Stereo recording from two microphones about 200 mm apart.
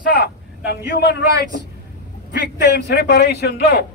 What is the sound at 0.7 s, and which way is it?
Speech, 55° left (ahead or behind).